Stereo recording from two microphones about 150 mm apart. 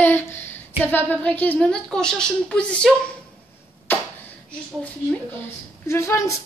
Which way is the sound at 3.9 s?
15° left (ahead or behind).